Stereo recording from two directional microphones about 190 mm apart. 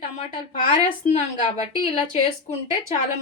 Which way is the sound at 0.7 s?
30° left (ahead or behind).